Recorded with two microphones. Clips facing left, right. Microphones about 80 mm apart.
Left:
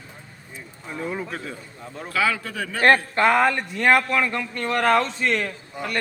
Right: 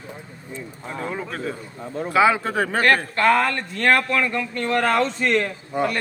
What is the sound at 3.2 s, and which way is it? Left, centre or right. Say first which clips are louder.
Speech: even; centre.